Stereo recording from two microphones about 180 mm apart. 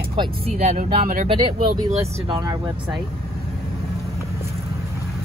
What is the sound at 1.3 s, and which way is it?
Speech, 30° right (ahead or behind).